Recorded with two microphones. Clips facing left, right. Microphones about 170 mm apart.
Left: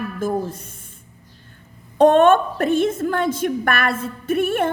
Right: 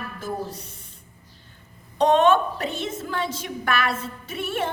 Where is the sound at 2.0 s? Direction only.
50° left (ahead or behind).